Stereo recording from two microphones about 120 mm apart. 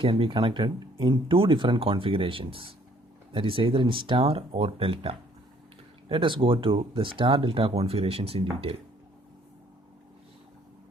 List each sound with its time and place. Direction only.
0.0 s speech: 50° right (ahead or behind)